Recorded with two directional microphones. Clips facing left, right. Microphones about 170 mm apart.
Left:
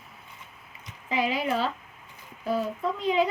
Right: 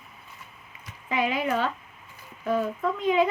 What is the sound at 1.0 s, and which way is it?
Speech, 35° left (ahead or behind).